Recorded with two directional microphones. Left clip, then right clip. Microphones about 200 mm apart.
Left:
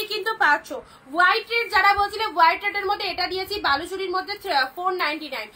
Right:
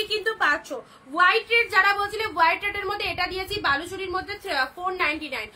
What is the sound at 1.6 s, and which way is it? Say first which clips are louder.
A woman's voice: left 2 dB; 20° right (ahead or behind).